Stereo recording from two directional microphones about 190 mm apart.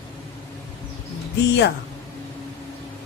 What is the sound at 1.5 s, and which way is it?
Speech, 65° left (ahead or behind).